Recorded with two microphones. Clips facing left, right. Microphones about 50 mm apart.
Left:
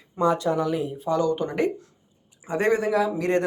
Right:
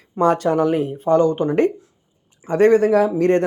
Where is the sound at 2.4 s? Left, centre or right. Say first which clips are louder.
Right 9 dB; right.